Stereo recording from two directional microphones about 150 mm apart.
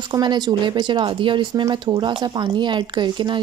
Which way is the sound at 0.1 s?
30° right (ahead or behind).